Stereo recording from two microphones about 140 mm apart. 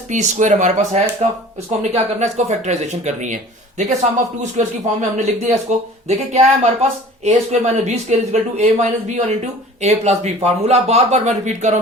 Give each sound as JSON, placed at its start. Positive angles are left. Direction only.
{"t": 0.1, "sound": "speech", "side_deg": -60}